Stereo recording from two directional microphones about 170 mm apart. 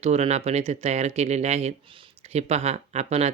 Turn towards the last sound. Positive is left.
turn(degrees=-40)  # may be behind; listen again after turning